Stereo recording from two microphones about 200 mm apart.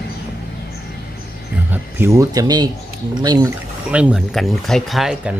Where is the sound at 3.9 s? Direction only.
5° right (ahead or behind).